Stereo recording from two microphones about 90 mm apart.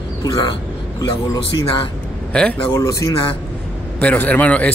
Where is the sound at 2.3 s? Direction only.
10° left (ahead or behind).